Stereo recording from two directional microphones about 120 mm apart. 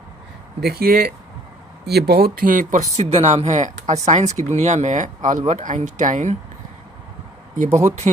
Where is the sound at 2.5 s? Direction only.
80° right.